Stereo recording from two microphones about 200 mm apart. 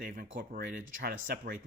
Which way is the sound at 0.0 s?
50° right (ahead or behind).